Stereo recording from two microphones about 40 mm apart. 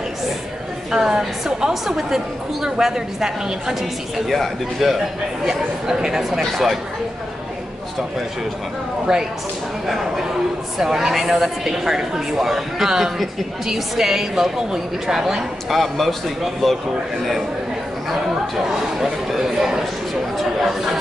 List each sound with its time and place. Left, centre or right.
0.9 s a woman's voice: centre
4.3 s a man's voice: centre
6.4 s a man's voice: centre
9.1 s a woman's voice: centre
18.7 s a woman's voice: centre